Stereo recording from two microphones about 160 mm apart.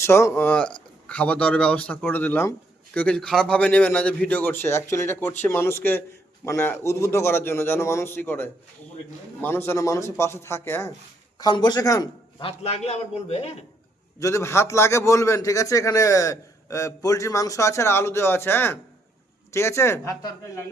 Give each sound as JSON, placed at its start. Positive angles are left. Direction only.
{"t": 0.0, "sound": "speech", "side_deg": 15}
{"t": 11.3, "sound": "a man's voice", "side_deg": 25}
{"t": 12.5, "sound": "a man's voice", "side_deg": 40}
{"t": 14.2, "sound": "a man's voice", "side_deg": 20}